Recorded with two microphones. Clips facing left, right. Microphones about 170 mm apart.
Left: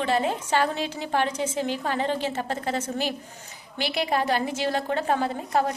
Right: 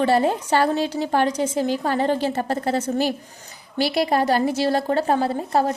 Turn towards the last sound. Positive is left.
turn(degrees=-35)  # may be behind; listen again after turning